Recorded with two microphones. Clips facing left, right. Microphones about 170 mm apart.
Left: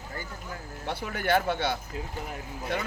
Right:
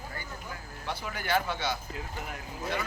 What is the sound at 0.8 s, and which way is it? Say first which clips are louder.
Speech: left 5 dB; 60° left (ahead or behind).